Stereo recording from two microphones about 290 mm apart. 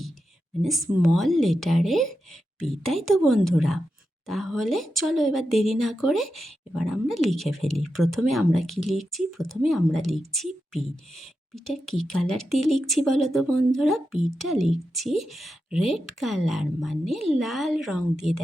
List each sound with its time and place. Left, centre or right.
0.6 s speech: centre